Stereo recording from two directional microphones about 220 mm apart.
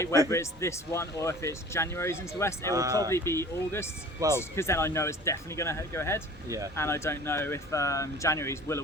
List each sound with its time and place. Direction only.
0.3 s speech: 10° left (ahead or behind)
2.7 s speech: 15° right (ahead or behind)
3.1 s speech: 10° left (ahead or behind)